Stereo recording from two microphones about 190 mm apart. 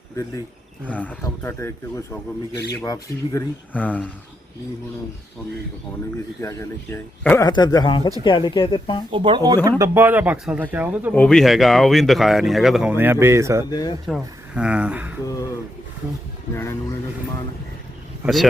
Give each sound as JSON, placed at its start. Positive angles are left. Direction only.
{"t": 0.9, "sound": "speech", "side_deg": 10}
{"t": 6.4, "sound": "speech", "side_deg": 15}
{"t": 9.1, "sound": "speech", "side_deg": -25}
{"t": 11.1, "sound": "speech", "side_deg": 5}
{"t": 13.7, "sound": "speech", "side_deg": 20}
{"t": 14.1, "sound": "speech", "side_deg": -5}